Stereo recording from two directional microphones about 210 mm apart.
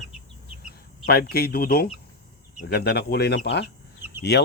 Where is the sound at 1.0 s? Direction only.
45° left (ahead or behind).